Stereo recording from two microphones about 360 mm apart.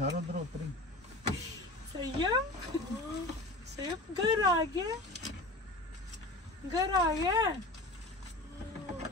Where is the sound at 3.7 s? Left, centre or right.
Centre.